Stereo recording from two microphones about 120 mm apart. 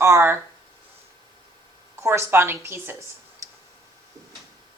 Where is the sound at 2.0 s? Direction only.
20° right (ahead or behind).